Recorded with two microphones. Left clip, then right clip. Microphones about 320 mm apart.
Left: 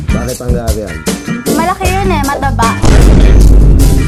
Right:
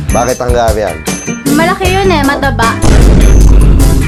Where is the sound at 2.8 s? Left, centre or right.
Centre.